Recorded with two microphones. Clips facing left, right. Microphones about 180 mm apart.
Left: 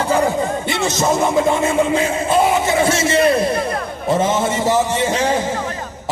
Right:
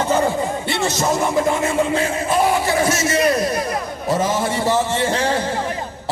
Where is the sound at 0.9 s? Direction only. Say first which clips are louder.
Left 4 dB; 20° left (ahead or behind).